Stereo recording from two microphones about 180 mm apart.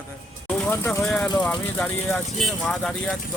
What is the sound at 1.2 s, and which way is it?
Speech, 25° left (ahead or behind).